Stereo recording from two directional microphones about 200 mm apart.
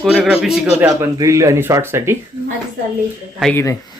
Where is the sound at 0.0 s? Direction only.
Centre (ahead or behind).